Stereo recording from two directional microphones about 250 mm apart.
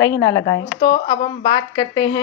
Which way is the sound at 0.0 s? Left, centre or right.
Centre.